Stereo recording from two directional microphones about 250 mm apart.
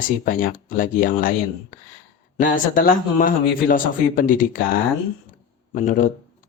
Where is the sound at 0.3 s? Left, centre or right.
Left.